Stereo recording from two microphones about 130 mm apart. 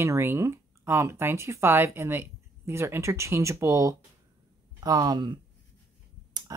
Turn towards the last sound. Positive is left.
turn(degrees=-30)  # may be behind; listen again after turning